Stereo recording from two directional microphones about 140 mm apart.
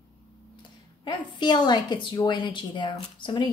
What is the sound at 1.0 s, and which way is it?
A woman's voice, 35° left (ahead or behind).